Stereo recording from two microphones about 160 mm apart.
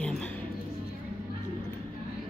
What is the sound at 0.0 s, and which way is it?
Music, 5° left (ahead or behind).